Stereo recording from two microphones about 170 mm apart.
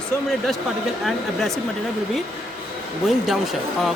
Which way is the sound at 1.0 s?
Centre (ahead or behind).